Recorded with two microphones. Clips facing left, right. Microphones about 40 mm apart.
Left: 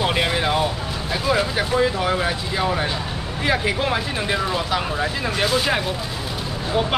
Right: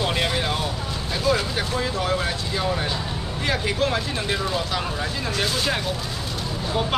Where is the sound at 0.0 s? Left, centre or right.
Centre.